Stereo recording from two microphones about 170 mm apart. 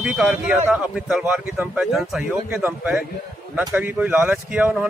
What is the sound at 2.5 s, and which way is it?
A man's voice, 15° right (ahead or behind).